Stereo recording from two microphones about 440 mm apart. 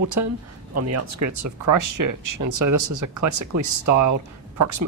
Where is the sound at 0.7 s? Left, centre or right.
Right.